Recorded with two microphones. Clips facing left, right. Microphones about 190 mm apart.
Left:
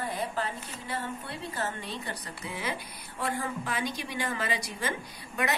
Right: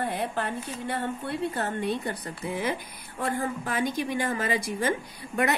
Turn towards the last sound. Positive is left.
turn(degrees=-50)  # may be behind; listen again after turning